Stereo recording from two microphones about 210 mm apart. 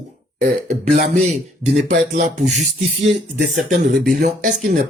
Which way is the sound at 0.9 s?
40° right (ahead or behind).